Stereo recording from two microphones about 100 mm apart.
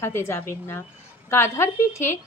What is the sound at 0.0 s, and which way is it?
Speech, 25° left (ahead or behind).